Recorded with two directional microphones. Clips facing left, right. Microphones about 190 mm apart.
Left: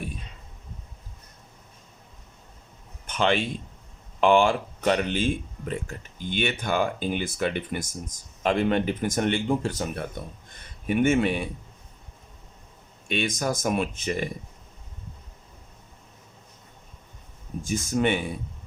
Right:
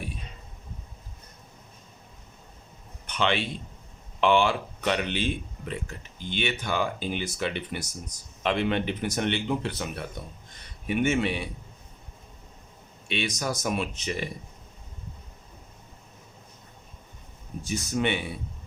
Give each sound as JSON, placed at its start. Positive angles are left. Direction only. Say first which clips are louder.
{"t": 3.1, "sound": "a man's voice", "louder": "left 3 dB", "side_deg": 45}
{"t": 13.1, "sound": "speech", "louder": "left 3 dB", "side_deg": 45}
{"t": 17.7, "sound": "speech", "louder": "left 3 dB", "side_deg": 50}